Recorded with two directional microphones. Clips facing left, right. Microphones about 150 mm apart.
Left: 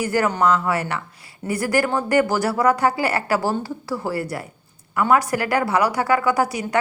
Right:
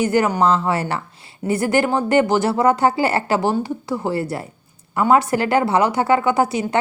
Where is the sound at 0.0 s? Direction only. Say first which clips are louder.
Right 3 dB; 20° right (ahead or behind).